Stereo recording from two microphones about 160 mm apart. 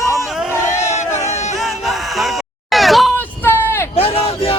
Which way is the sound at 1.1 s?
45° left (ahead or behind).